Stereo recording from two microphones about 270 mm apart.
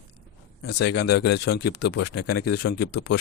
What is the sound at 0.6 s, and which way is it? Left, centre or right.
Speech, left.